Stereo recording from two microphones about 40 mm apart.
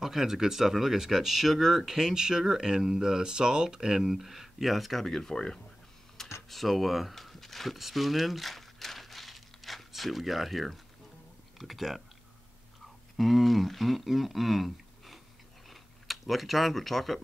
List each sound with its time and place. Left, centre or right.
0.0 s speech: centre
5.0 s speech: centre
6.2 s a sound: centre
11.5 s speech: centre
13.2 s speech: centre